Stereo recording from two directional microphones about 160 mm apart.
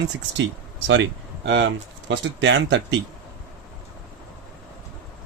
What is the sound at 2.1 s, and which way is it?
Speech, 90° right.